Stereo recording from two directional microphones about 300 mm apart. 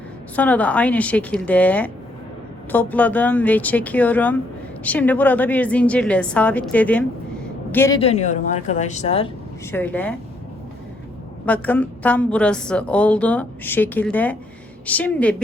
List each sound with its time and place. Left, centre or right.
0.3 s a woman's voice: centre
9.7 s a woman's voice: centre
11.4 s a woman's voice: centre